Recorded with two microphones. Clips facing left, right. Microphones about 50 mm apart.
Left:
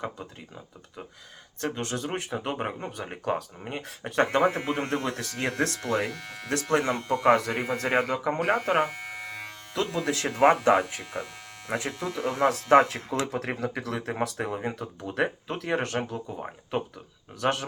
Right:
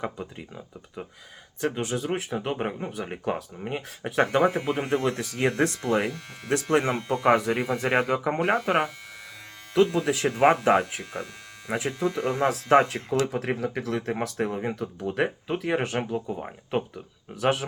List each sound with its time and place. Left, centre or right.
0.0 s speech: centre